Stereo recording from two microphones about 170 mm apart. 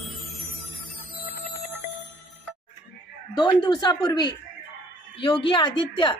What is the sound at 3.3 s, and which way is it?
Speech, 25° left (ahead or behind).